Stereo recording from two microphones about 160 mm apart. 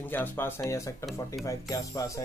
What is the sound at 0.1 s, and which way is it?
A man's voice, 15° left (ahead or behind).